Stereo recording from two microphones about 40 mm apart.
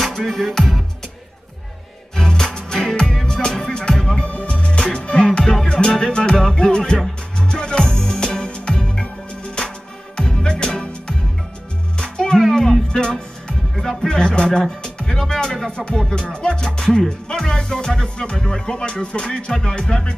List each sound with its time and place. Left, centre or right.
0.2 s music: centre
2.1 s music: centre
4.2 s music: left
5.4 s music: centre
5.7 s music: left
16.6 s speech: centre
17.3 s music: left